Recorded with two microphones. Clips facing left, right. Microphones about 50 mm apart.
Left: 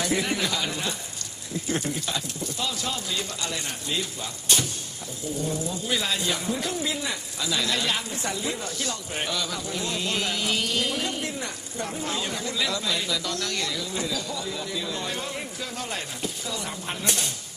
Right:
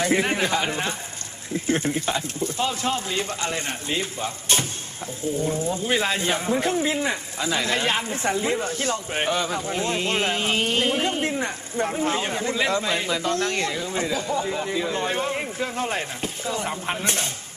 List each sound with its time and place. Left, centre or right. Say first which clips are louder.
0.0 s speech: right 4 dB; right